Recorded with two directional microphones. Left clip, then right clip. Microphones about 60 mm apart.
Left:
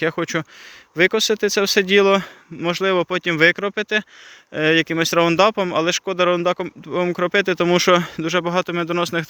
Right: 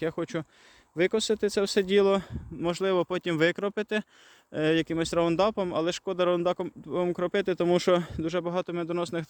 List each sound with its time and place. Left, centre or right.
0.0 s speech: centre
0.9 s speech: right
2.6 s speech: right
3.1 s speech: right
4.5 s speech: right
4.9 s speech: right
5.9 s speech: right
6.9 s speech: right
7.3 s speech: right
8.2 s speech: centre